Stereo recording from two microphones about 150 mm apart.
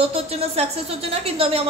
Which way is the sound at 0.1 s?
40° right (ahead or behind).